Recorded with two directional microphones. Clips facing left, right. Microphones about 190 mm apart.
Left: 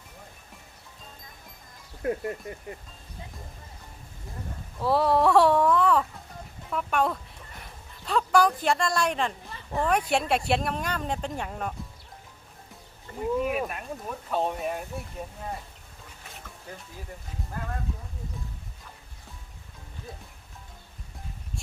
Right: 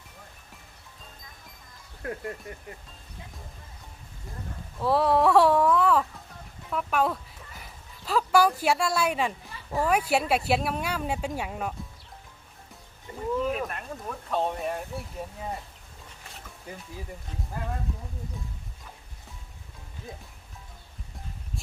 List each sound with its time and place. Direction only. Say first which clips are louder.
2.0 s speech: left 5 dB; 20° left (ahead or behind)
4.8 s speech: even; centre (ahead or behind)
13.1 s a sound: left 2 dB; 15° right (ahead or behind)
13.4 s speech: left 1 dB; 10° left (ahead or behind)
16.7 s speech: right 2 dB; 10° right (ahead or behind)